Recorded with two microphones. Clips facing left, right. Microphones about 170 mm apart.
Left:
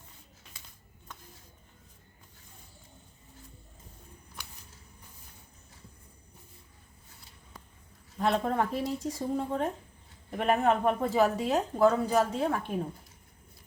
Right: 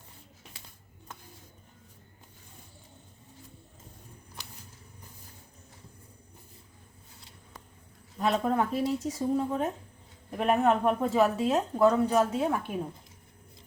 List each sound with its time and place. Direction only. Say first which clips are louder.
8.2 s a woman's voice: right 1 dB; centre (ahead or behind)